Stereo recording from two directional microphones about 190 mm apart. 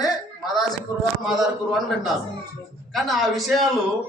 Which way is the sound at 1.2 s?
Centre (ahead or behind).